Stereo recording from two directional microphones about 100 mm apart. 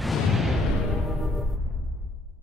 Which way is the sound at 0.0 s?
Centre (ahead or behind).